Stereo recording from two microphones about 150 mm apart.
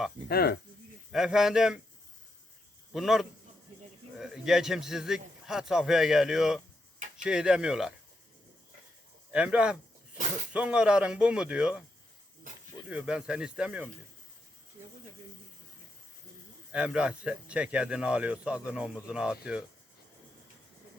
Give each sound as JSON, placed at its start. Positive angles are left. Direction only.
{"t": 0.3, "sound": "speech", "side_deg": 90}
{"t": 1.1, "sound": "a man's voice", "side_deg": -5}
{"t": 2.9, "sound": "a man's voice", "side_deg": 0}
{"t": 9.3, "sound": "speech", "side_deg": -5}
{"t": 12.9, "sound": "speech", "side_deg": -5}
{"t": 16.7, "sound": "speech", "side_deg": -5}